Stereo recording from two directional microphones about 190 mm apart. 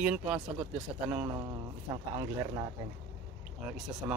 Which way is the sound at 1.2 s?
20° right (ahead or behind).